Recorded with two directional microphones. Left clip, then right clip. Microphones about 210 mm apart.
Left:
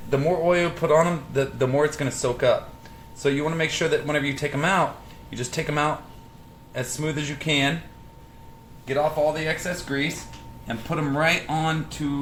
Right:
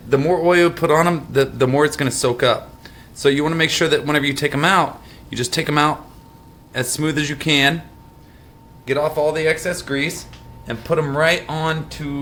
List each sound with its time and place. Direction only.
0.1 s a man's voice: 40° right (ahead or behind)
8.9 s speech: 50° right (ahead or behind)